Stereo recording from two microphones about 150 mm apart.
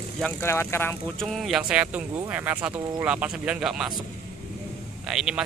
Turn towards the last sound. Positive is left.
turn(degrees=-5)  # may be behind; listen again after turning